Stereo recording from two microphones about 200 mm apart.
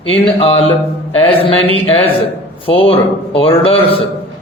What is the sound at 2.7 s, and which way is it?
Speech, 25° left (ahead or behind).